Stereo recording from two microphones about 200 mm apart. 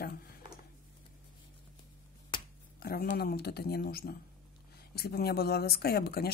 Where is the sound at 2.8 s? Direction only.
50° left (ahead or behind).